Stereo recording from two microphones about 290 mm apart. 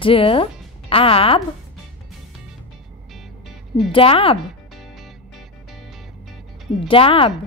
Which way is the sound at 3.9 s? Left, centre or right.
Centre.